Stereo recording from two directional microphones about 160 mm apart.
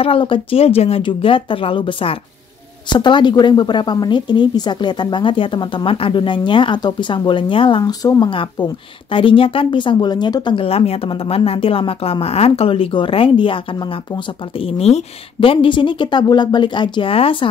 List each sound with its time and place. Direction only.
0.0 s a woman's voice: 35° left (ahead or behind)